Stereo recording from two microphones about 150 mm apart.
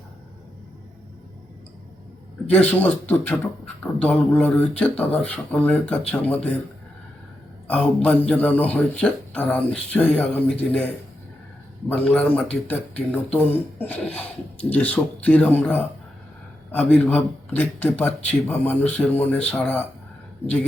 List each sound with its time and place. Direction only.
2.6 s speech: 10° left (ahead or behind)
7.7 s speech: 5° left (ahead or behind)